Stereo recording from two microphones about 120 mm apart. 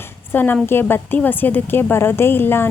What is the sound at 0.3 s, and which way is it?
A woman's voice, 15° left (ahead or behind).